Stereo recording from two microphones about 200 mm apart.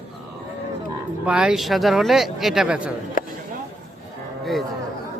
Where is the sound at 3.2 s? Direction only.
45° left (ahead or behind).